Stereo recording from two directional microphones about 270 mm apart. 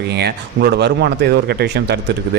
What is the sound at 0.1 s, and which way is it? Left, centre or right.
A man's voice, right.